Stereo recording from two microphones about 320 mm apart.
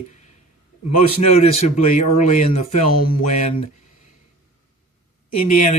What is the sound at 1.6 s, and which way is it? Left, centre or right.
Speech, left.